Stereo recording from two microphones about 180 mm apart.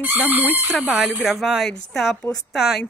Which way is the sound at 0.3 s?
10° right (ahead or behind).